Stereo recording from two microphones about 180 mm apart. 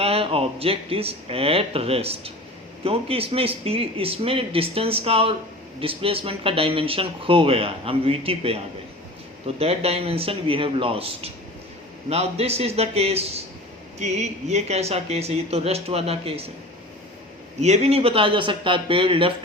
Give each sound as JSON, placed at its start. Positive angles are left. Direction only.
{"t": 0.0, "sound": "speech", "side_deg": -35}
{"t": 17.6, "sound": "speech", "side_deg": -35}